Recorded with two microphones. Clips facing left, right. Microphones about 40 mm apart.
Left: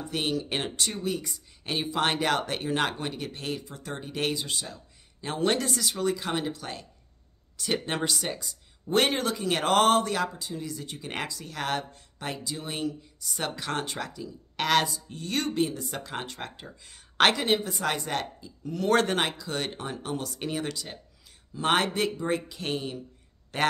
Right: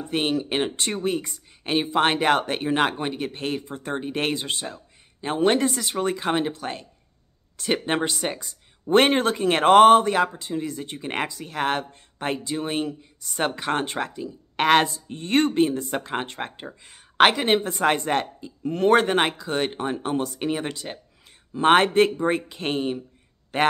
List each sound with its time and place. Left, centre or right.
0.1 s speech: right
0.8 s speech: right; by 17.5 s centre
17.5 s a man's voice: right
18.9 s a man's voice: right